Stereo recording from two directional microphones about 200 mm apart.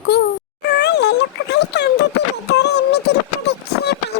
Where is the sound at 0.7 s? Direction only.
55° left (ahead or behind).